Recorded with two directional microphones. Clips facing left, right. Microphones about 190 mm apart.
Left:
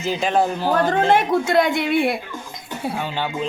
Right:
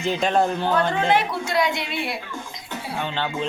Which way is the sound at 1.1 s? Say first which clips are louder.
Left 5 dB; 50° left (ahead or behind).